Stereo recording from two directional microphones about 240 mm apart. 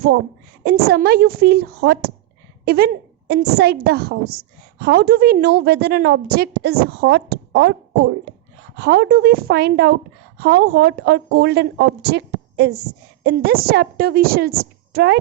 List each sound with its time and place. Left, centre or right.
0.6 s a woman's voice: right
8.7 s a woman's voice: right